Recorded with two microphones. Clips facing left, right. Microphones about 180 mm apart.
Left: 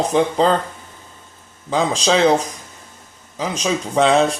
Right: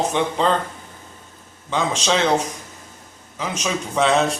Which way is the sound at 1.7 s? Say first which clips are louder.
Left 4 dB; 35° left (ahead or behind).